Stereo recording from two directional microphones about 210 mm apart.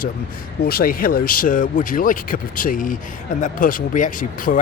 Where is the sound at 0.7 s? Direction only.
45° left (ahead or behind).